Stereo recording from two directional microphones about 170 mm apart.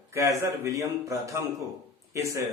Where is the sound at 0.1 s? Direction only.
15° right (ahead or behind).